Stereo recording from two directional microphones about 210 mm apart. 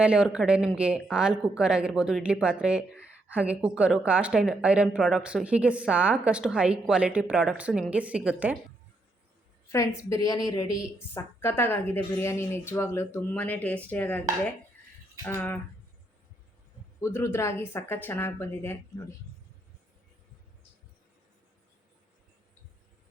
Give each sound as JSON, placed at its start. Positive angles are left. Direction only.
{"t": 0.0, "sound": "speech", "side_deg": -5}
{"t": 9.7, "sound": "a woman's voice", "side_deg": 15}
{"t": 15.2, "sound": "a woman's voice", "side_deg": 10}
{"t": 17.0, "sound": "a woman's voice", "side_deg": 10}